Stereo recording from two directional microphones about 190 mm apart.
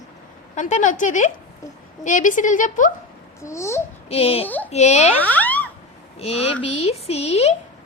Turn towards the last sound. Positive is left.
turn(degrees=35)  # may be behind; listen again after turning